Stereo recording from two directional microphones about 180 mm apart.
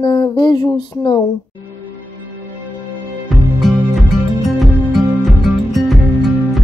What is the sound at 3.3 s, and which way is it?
Music, centre (ahead or behind).